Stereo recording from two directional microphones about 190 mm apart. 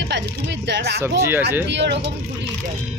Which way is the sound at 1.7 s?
65° right (ahead or behind).